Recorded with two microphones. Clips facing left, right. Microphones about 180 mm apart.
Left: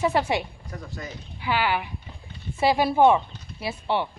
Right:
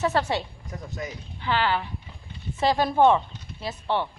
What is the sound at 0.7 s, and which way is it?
Speech, 20° right (ahead or behind).